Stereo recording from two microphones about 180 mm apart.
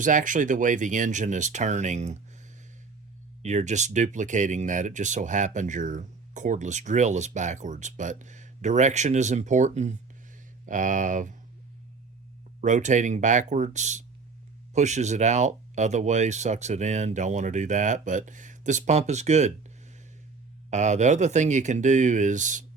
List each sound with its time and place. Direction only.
0.0 s speech: 45° right (ahead or behind)
3.4 s speech: 40° right (ahead or behind)
12.6 s speech: 40° right (ahead or behind)
20.7 s speech: 40° right (ahead or behind)